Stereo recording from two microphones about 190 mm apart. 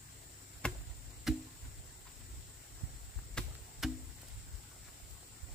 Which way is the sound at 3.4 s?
5° left (ahead or behind).